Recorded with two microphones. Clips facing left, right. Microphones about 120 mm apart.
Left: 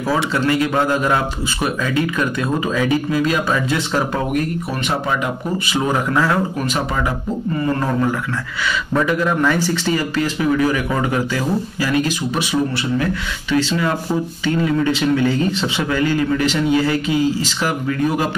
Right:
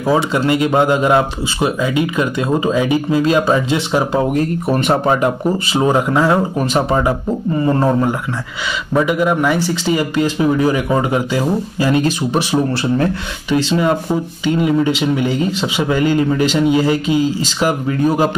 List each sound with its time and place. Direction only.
0.0 s speech: 20° right (ahead or behind)
4.6 s speech: 45° right (ahead or behind); by 8.1 s 25° right (ahead or behind)
8.9 s speech: 15° right (ahead or behind)
13.5 s speech: 20° right (ahead or behind)